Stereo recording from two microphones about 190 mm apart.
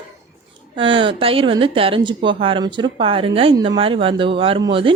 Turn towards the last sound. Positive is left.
turn(degrees=-25)  # may be behind; listen again after turning